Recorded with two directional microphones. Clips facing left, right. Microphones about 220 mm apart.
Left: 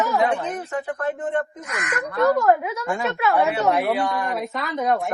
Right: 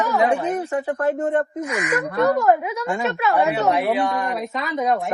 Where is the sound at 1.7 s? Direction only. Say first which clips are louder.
Right 5 dB; centre (ahead or behind).